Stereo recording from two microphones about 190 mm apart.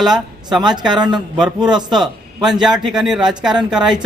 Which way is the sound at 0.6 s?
25° right (ahead or behind).